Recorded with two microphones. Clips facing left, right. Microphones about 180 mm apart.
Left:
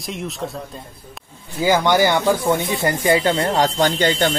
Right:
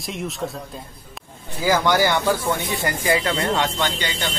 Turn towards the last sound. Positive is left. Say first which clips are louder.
# left 8 dB
turn(degrees=45)  # may be behind; listen again after turning